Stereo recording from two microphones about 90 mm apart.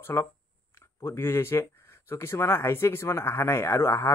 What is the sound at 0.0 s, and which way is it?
Speech, 25° left (ahead or behind).